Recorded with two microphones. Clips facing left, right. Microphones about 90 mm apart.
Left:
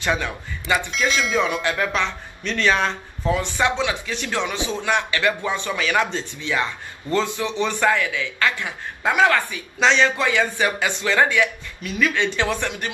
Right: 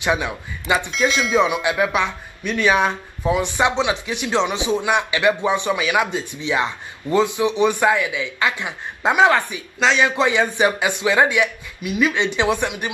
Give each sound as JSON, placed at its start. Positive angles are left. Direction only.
{"t": 0.0, "sound": "speech", "side_deg": -15}
{"t": 0.9, "sound": "speech", "side_deg": -5}
{"t": 9.8, "sound": "a man's voice", "side_deg": -5}
{"t": 10.0, "sound": "speech", "side_deg": -20}